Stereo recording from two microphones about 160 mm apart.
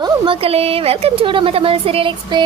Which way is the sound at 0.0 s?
35° right (ahead or behind).